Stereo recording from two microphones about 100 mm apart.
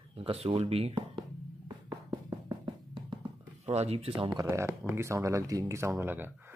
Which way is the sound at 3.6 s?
90° right.